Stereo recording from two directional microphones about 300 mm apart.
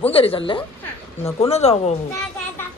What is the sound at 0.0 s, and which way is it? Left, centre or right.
A woman's voice, centre.